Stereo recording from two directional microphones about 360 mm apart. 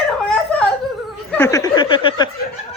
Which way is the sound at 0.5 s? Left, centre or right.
Centre.